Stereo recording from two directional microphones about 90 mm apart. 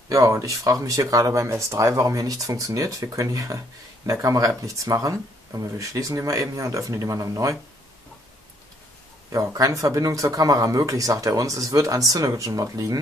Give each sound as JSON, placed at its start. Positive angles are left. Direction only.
{"t": 0.1, "sound": "speech", "side_deg": -35}
{"t": 9.3, "sound": "speech", "side_deg": -40}